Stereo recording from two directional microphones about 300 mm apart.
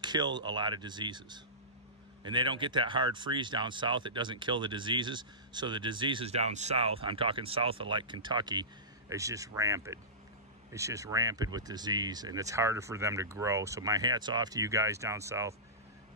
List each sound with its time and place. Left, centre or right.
0.0 s speech: centre